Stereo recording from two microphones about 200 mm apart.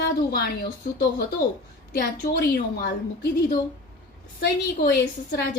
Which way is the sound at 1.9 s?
50° left (ahead or behind).